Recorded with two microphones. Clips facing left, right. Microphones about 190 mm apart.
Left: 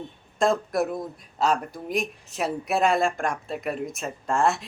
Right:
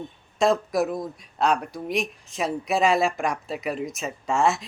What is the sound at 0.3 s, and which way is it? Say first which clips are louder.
Speech: right 1 dB; centre (ahead or behind).